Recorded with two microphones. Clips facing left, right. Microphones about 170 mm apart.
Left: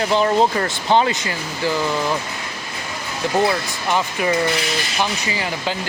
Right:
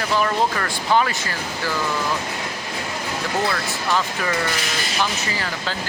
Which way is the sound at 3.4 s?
15° left (ahead or behind).